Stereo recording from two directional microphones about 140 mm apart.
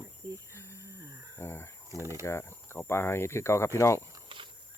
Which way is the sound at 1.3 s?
20° left (ahead or behind).